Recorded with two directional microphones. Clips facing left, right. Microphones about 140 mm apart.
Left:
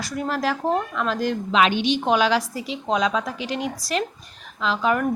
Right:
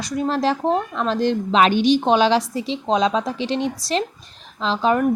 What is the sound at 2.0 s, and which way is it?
A woman's voice, 30° right (ahead or behind).